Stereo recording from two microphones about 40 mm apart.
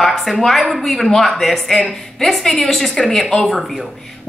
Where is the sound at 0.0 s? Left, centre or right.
Centre.